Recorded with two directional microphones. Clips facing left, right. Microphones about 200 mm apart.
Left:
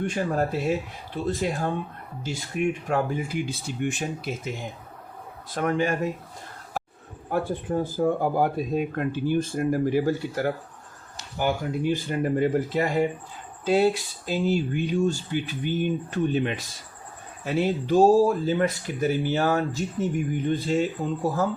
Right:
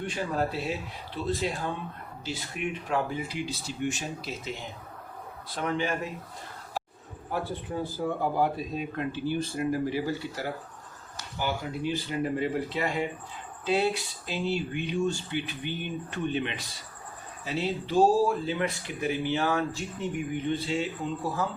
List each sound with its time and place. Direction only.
0.0 s speech: 50° left (ahead or behind)
5.5 s speech: 45° left (ahead or behind)
7.3 s speech: 50° left (ahead or behind)